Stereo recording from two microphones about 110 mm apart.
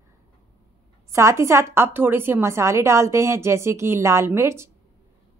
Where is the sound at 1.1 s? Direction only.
25° right (ahead or behind).